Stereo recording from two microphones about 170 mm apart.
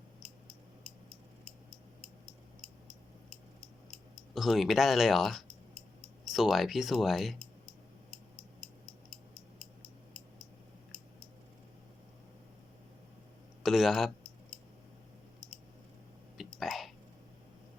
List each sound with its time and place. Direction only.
3.9 s speech: centre (ahead or behind)
13.6 s a man's voice: centre (ahead or behind)
16.4 s whispering: centre (ahead or behind)